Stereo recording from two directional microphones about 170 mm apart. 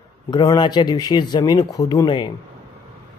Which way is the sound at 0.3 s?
25° left (ahead or behind).